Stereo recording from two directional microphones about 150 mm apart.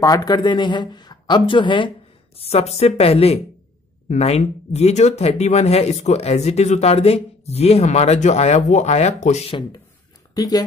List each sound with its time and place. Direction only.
0.0 s a woman's voice: 25° left (ahead or behind); by 9.4 s 50° left (ahead or behind)
9.5 s a woman's voice: 35° left (ahead or behind)